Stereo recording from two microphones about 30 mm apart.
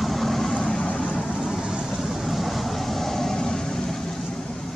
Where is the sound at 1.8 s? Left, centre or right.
Centre.